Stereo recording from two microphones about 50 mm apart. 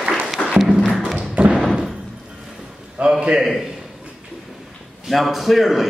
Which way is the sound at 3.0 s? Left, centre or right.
Right.